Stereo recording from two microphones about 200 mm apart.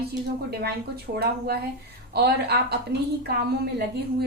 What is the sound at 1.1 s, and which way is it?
A woman's voice, 50° right (ahead or behind).